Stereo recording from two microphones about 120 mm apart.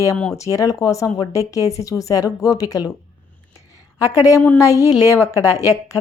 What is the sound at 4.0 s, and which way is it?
A woman's voice, 30° left (ahead or behind).